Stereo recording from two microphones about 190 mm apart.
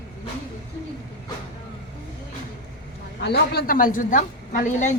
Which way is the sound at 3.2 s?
60° left (ahead or behind).